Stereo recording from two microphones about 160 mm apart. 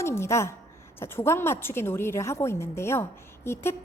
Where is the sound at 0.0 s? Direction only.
15° left (ahead or behind).